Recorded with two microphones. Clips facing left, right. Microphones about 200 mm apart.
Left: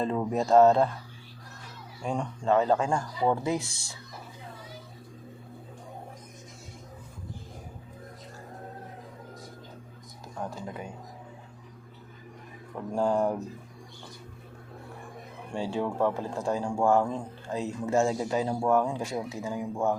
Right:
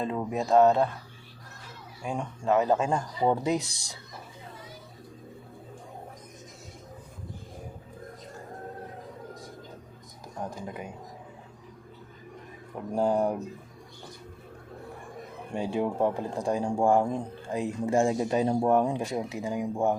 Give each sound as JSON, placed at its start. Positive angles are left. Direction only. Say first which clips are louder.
{"t": 0.0, "sound": "speech", "louder": "left 2 dB", "side_deg": -5}
{"t": 2.0, "sound": "speech", "louder": "left 1 dB", "side_deg": -5}
{"t": 2.6, "sound": "speech", "louder": "right 1 dB", "side_deg": -20}
{"t": 12.9, "sound": "speech", "louder": "right 1 dB", "side_deg": -15}
{"t": 15.5, "sound": "speech", "louder": "right 1 dB", "side_deg": -15}